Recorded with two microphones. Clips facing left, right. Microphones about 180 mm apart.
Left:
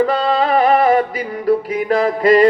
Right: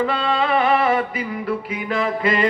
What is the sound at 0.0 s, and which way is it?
Music, 40° left (ahead or behind).